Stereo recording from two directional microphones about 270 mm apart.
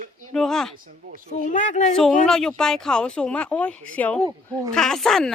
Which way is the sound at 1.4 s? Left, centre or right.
Left.